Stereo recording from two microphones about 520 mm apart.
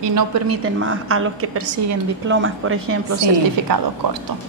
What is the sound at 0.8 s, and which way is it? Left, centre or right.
A woman's voice, right.